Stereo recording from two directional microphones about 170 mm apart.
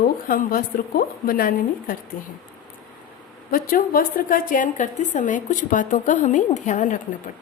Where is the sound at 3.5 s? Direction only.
60° left (ahead or behind).